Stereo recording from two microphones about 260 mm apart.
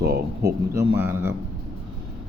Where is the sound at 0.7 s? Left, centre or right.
Centre.